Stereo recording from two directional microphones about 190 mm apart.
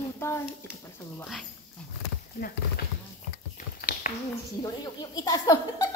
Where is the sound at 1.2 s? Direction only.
Centre (ahead or behind).